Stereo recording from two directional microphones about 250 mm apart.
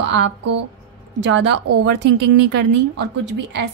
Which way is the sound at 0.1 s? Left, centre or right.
Right.